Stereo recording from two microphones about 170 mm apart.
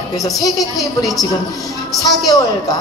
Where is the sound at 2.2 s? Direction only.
20° left (ahead or behind).